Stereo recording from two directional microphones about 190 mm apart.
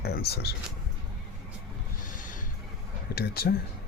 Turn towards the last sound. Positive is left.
turn(degrees=55)  # may be behind; listen again after turning